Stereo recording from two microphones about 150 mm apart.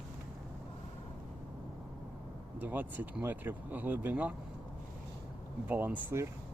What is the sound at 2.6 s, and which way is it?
Speech, 10° right (ahead or behind).